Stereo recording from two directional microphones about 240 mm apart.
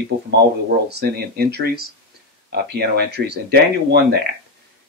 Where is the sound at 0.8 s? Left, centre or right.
Right.